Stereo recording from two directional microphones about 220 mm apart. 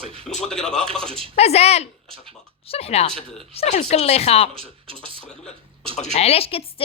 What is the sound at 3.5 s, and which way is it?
Speech, 30° left (ahead or behind).